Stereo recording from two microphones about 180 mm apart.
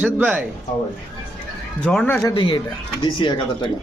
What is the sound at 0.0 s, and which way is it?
Speech, 10° right (ahead or behind).